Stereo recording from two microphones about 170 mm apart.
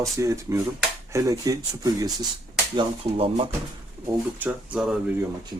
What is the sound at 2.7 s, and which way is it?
Speech, 35° right (ahead or behind).